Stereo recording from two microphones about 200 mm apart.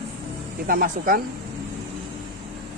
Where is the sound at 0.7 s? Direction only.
45° right (ahead or behind).